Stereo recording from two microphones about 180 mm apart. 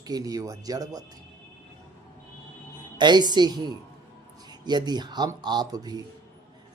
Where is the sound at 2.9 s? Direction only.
25° right (ahead or behind).